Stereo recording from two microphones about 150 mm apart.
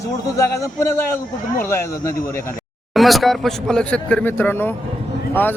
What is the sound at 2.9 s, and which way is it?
Speech, centre (ahead or behind).